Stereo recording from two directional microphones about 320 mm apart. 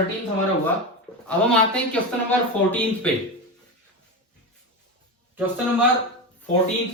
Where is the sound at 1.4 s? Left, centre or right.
Centre.